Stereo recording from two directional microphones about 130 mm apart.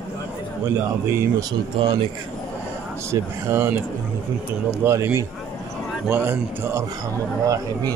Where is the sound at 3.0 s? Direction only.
20° right (ahead or behind).